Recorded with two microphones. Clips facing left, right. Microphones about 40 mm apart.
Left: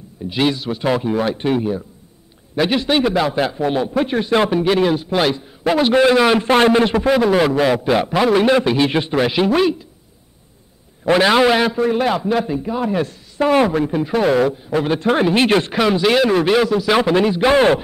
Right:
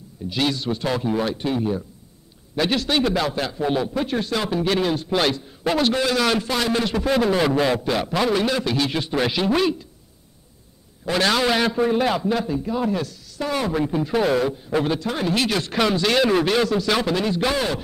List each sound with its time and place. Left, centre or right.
0.3 s a man's voice: left
2.5 s a man's voice: centre
4.6 s a man's voice: centre
6.4 s a man's voice: left
6.7 s speech: left
7.1 s a man's voice: centre; by 9.2 s left
9.3 s a man's voice: centre
11.1 s a man's voice: left
12.9 s speech: left
13.7 s a man's voice: centre
15.0 s a man's voice: left
15.7 s a man's voice: centre